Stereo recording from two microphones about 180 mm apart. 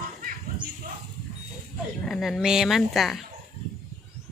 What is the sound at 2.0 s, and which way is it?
Speech, centre (ahead or behind).